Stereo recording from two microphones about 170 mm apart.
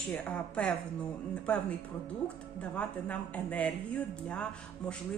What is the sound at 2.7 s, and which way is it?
Speech, 10° left (ahead or behind).